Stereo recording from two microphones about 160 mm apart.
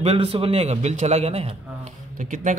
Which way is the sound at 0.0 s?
40° right (ahead or behind).